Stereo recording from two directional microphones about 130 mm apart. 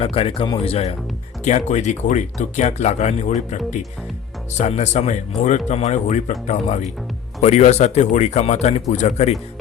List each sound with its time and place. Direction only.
0.0 s speech: 45° left (ahead or behind)
1.5 s speech: 65° left (ahead or behind)